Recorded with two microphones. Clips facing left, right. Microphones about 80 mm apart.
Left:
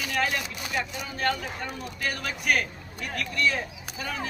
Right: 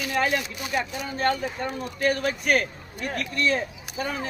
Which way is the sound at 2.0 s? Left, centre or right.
Right.